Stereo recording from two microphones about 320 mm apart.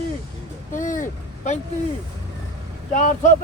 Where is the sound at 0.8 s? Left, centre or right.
Left.